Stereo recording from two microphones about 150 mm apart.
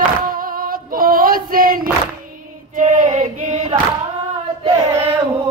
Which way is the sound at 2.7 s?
55° right (ahead or behind).